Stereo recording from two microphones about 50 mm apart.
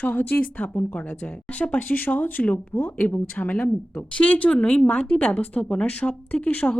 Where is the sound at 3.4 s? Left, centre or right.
Left.